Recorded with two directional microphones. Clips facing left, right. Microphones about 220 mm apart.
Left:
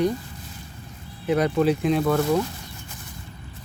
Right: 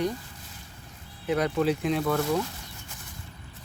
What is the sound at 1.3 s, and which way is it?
Speech, 25° left (ahead or behind).